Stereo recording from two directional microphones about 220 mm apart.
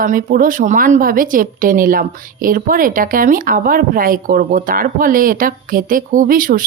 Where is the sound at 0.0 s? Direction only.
35° right (ahead or behind).